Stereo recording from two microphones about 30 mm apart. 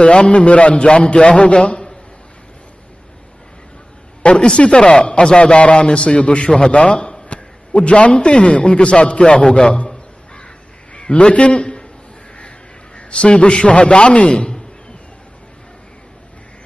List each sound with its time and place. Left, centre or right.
0.0 s a man's voice: left
4.2 s a man's voice: left
6.7 s a sound: left
8.1 s a man's voice: left
10.9 s a man's voice: left